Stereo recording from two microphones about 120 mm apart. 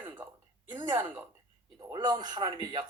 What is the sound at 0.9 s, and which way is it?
Speech, 20° right (ahead or behind).